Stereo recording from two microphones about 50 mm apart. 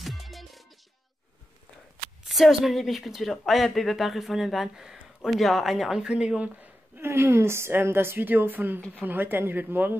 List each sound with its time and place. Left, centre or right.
0.0 s music: centre
2.2 s speech: centre
7.0 s a woman's voice: right